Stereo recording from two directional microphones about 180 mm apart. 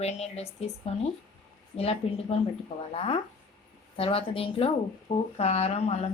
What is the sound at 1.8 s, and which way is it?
A woman's voice, 35° left (ahead or behind).